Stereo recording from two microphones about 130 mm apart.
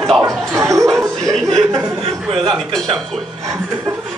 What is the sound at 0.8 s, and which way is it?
Speech, 5° left (ahead or behind).